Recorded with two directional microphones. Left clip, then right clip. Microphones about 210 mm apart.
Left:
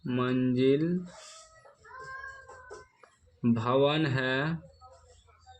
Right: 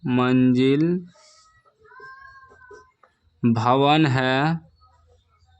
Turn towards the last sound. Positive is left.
turn(degrees=-45)  # may be behind; listen again after turning